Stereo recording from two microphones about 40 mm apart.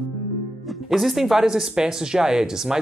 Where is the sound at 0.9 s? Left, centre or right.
Centre.